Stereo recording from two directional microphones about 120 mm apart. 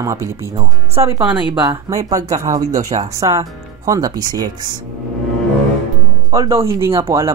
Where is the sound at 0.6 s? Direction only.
55° right (ahead or behind).